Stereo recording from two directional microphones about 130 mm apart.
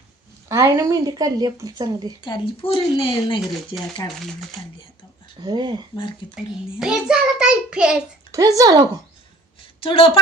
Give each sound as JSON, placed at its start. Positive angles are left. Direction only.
{"t": 0.4, "sound": "speech", "side_deg": -25}
{"t": 2.2, "sound": "speech", "side_deg": 40}
{"t": 4.2, "sound": "speech", "side_deg": 0}
{"t": 5.4, "sound": "speech", "side_deg": -35}
{"t": 6.3, "sound": "a child's voice", "side_deg": -5}
{"t": 8.3, "sound": "speech", "side_deg": -25}
{"t": 9.8, "sound": "a woman's voice", "side_deg": 45}